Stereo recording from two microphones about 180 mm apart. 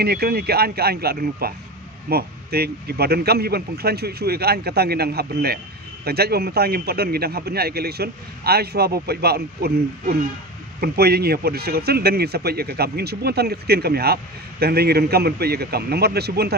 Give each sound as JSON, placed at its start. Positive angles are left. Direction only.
{"t": 0.0, "sound": "a man's voice", "side_deg": -60}